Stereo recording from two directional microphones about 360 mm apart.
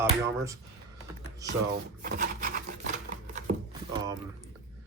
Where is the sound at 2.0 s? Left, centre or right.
Right.